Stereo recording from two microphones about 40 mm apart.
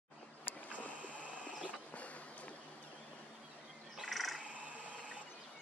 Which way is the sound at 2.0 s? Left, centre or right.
Left.